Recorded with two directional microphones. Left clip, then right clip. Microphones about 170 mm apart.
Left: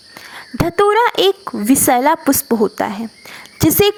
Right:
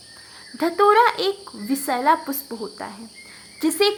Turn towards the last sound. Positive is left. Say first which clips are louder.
# left 7 dB
turn(degrees=40)  # may be behind; listen again after turning